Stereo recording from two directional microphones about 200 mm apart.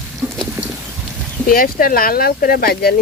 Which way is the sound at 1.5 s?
45° left (ahead or behind).